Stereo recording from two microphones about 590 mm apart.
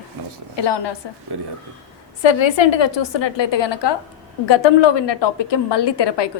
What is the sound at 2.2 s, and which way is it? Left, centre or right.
A woman's voice, left.